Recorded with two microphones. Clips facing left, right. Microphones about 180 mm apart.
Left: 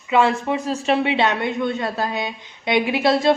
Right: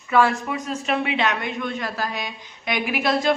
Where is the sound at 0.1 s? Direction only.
25° left (ahead or behind).